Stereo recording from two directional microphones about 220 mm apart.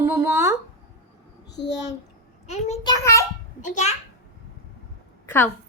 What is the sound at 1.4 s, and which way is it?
Speech, 50° left (ahead or behind).